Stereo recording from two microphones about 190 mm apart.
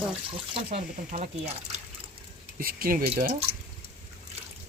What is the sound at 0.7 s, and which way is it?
Speech, 35° right (ahead or behind).